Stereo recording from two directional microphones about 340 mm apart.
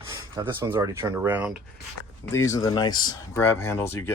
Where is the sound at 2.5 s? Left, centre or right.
Centre.